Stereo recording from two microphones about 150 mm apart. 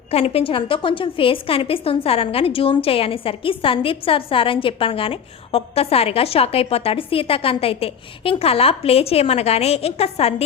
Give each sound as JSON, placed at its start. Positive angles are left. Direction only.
{"t": 0.1, "sound": "a woman's voice", "side_deg": 40}